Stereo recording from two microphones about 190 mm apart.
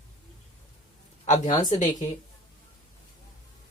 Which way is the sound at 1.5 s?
40° left (ahead or behind).